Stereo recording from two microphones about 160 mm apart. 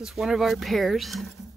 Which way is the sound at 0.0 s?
Centre (ahead or behind).